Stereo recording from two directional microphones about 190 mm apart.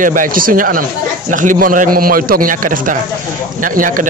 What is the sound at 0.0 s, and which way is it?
Speech, 45° right (ahead or behind).